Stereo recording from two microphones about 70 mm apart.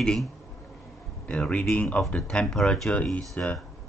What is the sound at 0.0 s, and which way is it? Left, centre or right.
Speech, centre.